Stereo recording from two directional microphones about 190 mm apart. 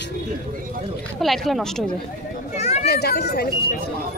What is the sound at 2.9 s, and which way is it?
Speech, 60° left (ahead or behind).